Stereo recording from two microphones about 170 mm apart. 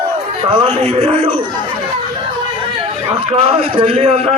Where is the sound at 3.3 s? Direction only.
35° right (ahead or behind).